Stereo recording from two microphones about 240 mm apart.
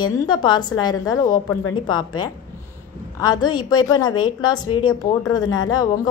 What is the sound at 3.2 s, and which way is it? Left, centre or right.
A woman's voice, centre.